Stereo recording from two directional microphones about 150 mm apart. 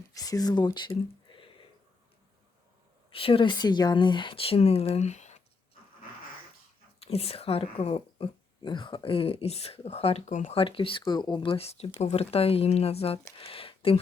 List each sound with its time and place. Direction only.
0.1 s speech: 25° left (ahead or behind)
3.1 s speech: 35° left (ahead or behind)
7.0 s speech: 40° left (ahead or behind)
10.5 s speech: 35° left (ahead or behind)